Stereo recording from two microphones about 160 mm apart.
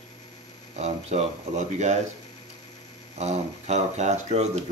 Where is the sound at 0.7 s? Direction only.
40° right (ahead or behind).